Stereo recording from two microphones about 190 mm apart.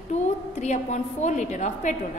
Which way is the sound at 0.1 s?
35° left (ahead or behind).